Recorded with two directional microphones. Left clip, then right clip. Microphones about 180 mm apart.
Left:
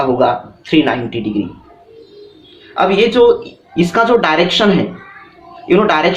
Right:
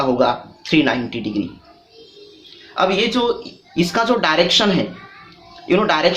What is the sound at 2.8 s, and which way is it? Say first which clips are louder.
A man's voice: left 7 dB; 20° right (ahead or behind).